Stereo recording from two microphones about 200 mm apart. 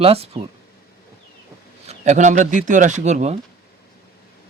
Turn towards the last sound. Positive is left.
turn(degrees=-35)  # may be behind; listen again after turning